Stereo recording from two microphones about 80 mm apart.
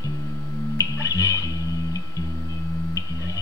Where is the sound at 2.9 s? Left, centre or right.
Left.